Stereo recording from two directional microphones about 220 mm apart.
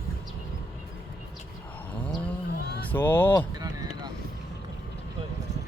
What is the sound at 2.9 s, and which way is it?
Speech, 10° left (ahead or behind).